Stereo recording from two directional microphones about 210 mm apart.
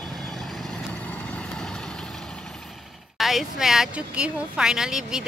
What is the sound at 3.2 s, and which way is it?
A woman's voice, centre (ahead or behind).